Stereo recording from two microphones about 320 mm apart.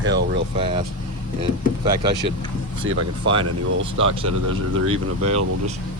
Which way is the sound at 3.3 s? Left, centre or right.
Right.